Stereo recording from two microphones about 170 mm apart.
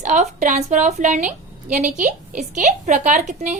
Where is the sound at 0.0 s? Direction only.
45° right (ahead or behind).